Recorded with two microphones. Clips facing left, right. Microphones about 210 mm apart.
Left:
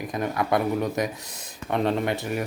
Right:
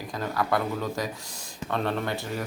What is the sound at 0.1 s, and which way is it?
Speech, 20° left (ahead or behind).